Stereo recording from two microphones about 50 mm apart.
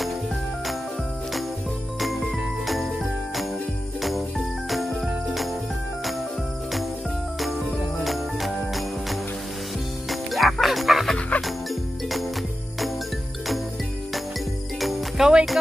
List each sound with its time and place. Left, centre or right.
2.6 s jingle bell: centre
4.6 s jingle bell: centre
8.0 s jingle bell: centre
10.0 s dog: centre
11.1 s dog: left
14.8 s music: centre